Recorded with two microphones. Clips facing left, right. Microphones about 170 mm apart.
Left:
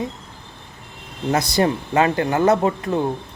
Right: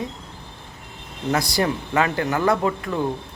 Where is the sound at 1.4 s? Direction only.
20° left (ahead or behind).